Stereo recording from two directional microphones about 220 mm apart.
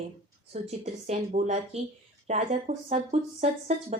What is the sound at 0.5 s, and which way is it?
A woman's voice, 30° right (ahead or behind).